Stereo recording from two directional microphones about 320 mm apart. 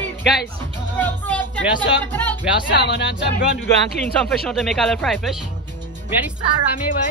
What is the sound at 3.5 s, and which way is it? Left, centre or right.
Speech, centre.